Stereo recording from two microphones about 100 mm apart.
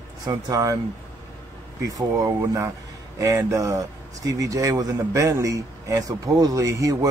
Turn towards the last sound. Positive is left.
turn(degrees=-35)  # may be behind; listen again after turning